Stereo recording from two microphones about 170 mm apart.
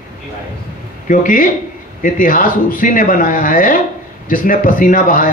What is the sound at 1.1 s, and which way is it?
A man's voice, 50° left (ahead or behind).